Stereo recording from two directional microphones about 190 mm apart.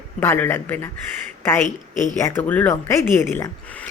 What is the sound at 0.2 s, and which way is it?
Speech, 10° left (ahead or behind).